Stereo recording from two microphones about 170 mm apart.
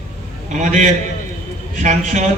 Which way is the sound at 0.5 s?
45° right (ahead or behind).